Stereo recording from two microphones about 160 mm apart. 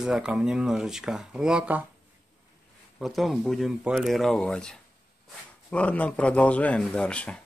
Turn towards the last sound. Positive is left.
turn(degrees=5)  # may be behind; listen again after turning